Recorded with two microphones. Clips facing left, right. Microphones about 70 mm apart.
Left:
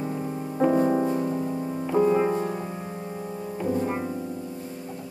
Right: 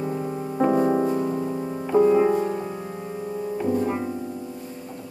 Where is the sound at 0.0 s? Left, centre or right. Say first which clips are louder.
Right 2 dB; centre.